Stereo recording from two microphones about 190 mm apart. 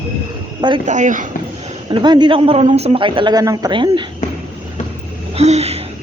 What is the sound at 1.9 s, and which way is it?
A woman's voice, 25° right (ahead or behind).